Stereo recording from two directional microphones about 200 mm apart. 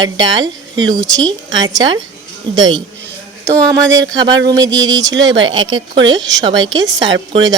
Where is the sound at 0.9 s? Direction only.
15° right (ahead or behind).